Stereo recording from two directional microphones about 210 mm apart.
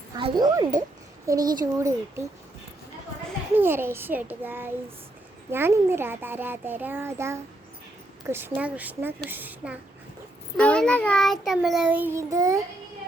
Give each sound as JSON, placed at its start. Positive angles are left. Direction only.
{"t": 0.2, "sound": "a child's voice", "side_deg": -20}
{"t": 3.5, "sound": "a child's voice", "side_deg": -10}
{"t": 10.6, "sound": "child singing", "side_deg": 5}